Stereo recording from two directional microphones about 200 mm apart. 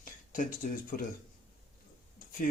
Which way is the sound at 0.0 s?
40° left (ahead or behind).